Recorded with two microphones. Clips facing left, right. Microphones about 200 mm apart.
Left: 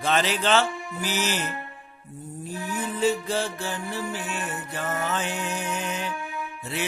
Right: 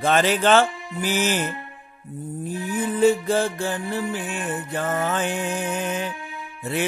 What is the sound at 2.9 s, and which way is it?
Music, 50° right (ahead or behind).